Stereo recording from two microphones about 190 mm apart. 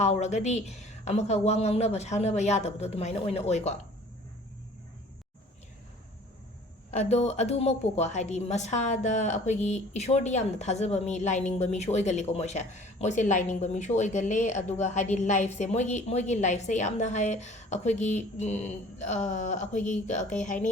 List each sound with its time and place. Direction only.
0.0 s a woman's voice: 35° left (ahead or behind)
6.9 s a woman's voice: 35° left (ahead or behind)